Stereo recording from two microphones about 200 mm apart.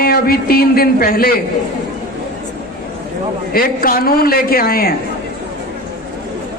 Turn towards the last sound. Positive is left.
turn(degrees=45)  # may be behind; listen again after turning